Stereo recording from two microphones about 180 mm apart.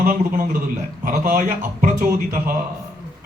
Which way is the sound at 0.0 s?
50° right (ahead or behind).